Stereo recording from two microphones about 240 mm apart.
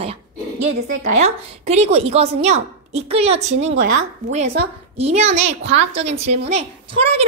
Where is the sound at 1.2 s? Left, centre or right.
Right.